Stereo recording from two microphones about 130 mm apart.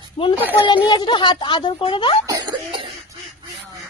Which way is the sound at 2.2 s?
30° right (ahead or behind).